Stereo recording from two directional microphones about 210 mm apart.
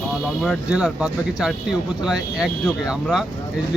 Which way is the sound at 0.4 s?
5° right (ahead or behind).